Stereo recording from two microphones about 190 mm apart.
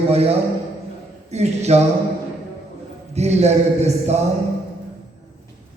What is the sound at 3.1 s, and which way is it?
Speech, 35° right (ahead or behind).